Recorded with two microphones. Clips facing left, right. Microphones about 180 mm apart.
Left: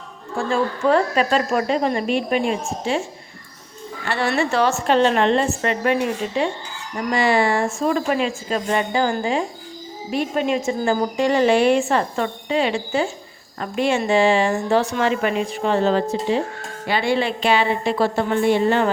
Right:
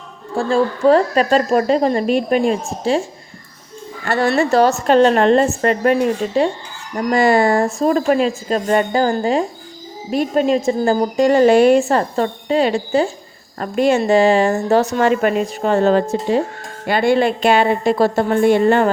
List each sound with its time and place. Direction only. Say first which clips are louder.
0.3 s a woman's voice: right 5 dB; 35° right (ahead or behind)
4.0 s a woman's voice: right 5 dB; 45° right (ahead or behind)